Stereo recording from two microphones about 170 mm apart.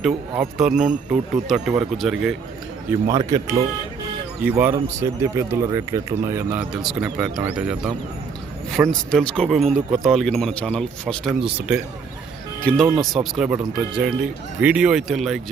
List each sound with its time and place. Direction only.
0.3 s speech: 5° right (ahead or behind)
3.1 s speech: 20° right (ahead or behind)
6.6 s speech: 5° right (ahead or behind)
11.4 s speech: 5° right (ahead or behind)
12.6 s speech: 5° left (ahead or behind)